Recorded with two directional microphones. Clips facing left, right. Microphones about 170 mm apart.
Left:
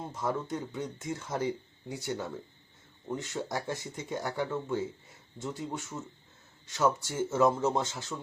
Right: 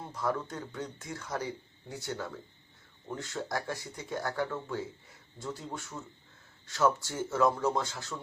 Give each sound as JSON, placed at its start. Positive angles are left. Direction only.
{"t": 0.0, "sound": "speech", "side_deg": 20}